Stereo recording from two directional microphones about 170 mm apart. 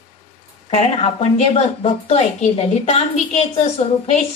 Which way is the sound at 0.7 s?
40° left (ahead or behind).